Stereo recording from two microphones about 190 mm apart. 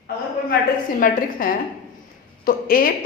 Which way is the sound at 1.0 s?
45° left (ahead or behind).